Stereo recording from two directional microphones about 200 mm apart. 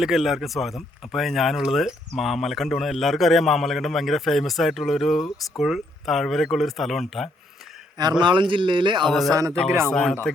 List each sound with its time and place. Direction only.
0.0 s speech: centre (ahead or behind)
8.2 s speech: 25° right (ahead or behind)
9.0 s speech: centre (ahead or behind)
9.3 s a man's voice: 15° right (ahead or behind)
9.9 s speech: 5° left (ahead or behind)